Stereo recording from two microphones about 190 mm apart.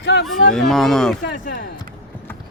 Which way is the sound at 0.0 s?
70° left (ahead or behind).